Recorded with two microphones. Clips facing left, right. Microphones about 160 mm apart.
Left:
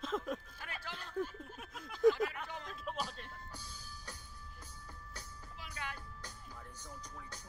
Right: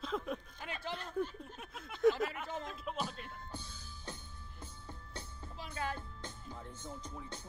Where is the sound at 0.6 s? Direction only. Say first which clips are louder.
Right 5 dB; 20° right (ahead or behind).